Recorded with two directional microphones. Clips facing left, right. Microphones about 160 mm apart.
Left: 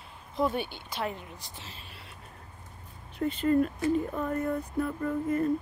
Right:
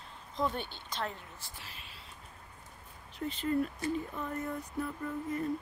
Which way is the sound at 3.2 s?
55° left (ahead or behind).